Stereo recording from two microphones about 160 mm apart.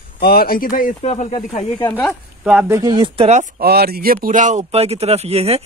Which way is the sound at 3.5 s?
80° right.